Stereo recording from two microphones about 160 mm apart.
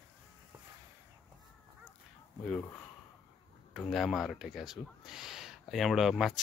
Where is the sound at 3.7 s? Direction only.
Centre (ahead or behind).